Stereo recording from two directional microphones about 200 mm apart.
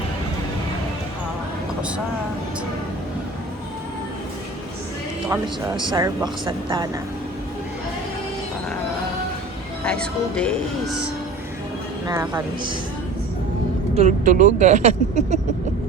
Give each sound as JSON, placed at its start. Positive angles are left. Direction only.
{"t": 5.8, "sound": "speech", "side_deg": -20}
{"t": 9.8, "sound": "speech", "side_deg": 5}
{"t": 12.0, "sound": "speech", "side_deg": -20}
{"t": 13.9, "sound": "speech", "side_deg": -35}